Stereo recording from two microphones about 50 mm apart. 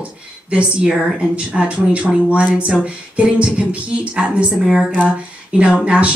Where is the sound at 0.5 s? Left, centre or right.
Right.